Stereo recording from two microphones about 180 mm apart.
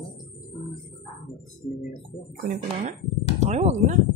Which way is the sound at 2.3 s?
55° right (ahead or behind).